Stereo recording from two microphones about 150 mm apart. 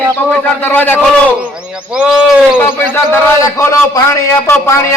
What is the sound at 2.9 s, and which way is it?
A man's voice, 15° left (ahead or behind).